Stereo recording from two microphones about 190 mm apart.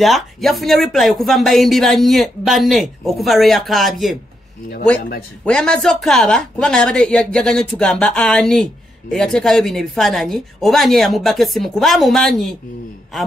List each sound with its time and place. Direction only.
0.0 s speech: centre (ahead or behind)
5.4 s speech: 5° left (ahead or behind)